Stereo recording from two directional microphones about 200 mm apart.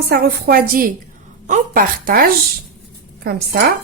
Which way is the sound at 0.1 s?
50° right (ahead or behind).